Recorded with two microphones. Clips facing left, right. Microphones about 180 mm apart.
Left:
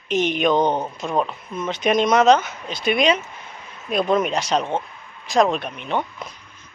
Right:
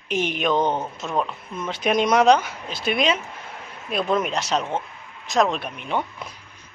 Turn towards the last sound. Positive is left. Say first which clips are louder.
# left 2 dB
turn(degrees=-5)  # may be behind; listen again after turning